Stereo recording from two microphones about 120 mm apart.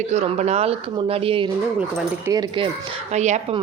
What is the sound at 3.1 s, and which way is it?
Speech, 75° right (ahead or behind).